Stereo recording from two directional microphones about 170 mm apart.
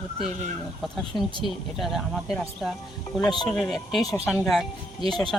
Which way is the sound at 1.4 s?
Centre (ahead or behind).